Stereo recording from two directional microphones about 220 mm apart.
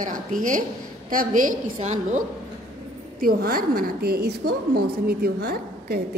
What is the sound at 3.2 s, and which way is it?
A woman's voice, 40° right (ahead or behind).